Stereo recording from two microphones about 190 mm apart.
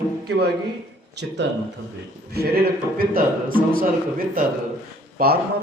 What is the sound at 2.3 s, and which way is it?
A man's voice, 55° right (ahead or behind).